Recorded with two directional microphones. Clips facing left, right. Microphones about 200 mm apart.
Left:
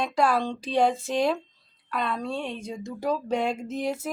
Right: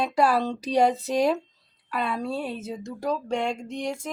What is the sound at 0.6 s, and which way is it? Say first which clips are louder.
Female singing: right 2 dB; 40° right (ahead or behind).